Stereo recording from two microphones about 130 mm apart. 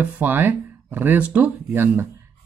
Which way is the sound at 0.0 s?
15° right (ahead or behind).